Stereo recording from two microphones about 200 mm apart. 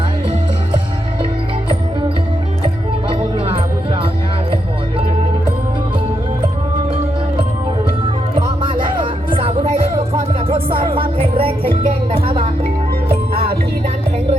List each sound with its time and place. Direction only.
3.1 s music: 25° right (ahead or behind)
8.4 s music: 25° right (ahead or behind)
10.8 s music: 25° right (ahead or behind)
13.3 s music: 50° right (ahead or behind)